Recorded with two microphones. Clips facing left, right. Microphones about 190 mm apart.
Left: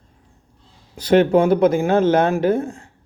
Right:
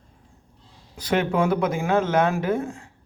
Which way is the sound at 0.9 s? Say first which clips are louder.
Left 8 dB; 30° left (ahead or behind).